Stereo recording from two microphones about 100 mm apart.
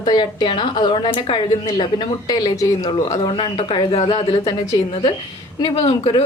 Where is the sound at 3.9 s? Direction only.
75° left (ahead or behind).